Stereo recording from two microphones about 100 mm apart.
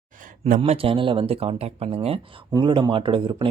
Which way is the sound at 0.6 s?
65° right (ahead or behind).